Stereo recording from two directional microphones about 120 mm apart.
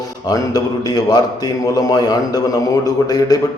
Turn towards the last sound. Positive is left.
turn(degrees=30)  # may be behind; listen again after turning